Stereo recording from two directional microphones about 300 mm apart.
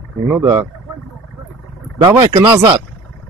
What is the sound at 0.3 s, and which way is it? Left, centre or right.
Speech, centre.